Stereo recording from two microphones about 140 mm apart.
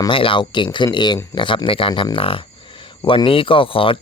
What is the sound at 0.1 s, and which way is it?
Speech, 40° left (ahead or behind).